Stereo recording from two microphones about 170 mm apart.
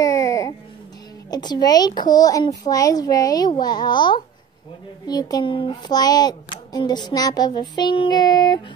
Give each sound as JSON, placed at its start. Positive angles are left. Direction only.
{"t": 0.0, "sound": "music", "side_deg": 20}
{"t": 1.3, "sound": "speech", "side_deg": 25}